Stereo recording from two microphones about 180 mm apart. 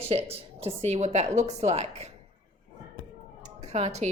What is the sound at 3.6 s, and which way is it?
Speech, 40° right (ahead or behind).